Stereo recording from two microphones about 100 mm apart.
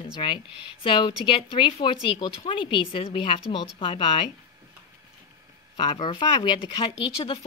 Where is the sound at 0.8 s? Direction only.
60° left (ahead or behind).